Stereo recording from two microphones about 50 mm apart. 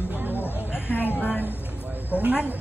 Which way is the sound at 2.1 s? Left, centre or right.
Right.